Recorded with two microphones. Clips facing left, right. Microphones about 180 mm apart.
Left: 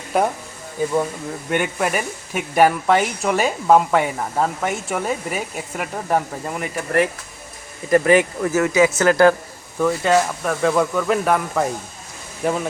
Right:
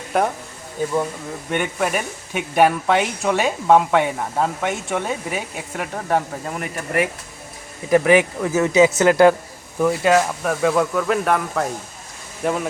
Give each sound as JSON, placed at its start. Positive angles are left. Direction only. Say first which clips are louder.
{"t": 1.5, "sound": "speech", "louder": "left 1 dB", "side_deg": 5}